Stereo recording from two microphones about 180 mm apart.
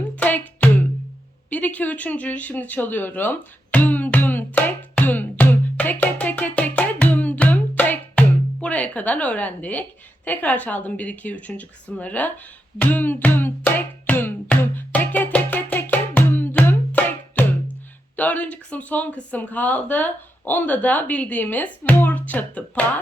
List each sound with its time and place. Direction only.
0.2 s music: 10° left (ahead or behind)
1.5 s a sound: 10° left (ahead or behind)
8.6 s a woman's voice: 10° left (ahead or behind)
12.8 s music: 10° left (ahead or behind)
18.2 s a sound: 10° left (ahead or behind)
18.5 s speech: 10° left (ahead or behind)